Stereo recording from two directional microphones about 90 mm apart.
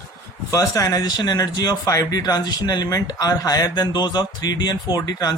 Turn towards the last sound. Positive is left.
turn(degrees=45)  # may be behind; listen again after turning